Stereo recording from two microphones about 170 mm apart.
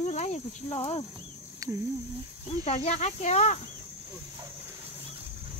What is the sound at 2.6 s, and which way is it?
Speech, 40° left (ahead or behind).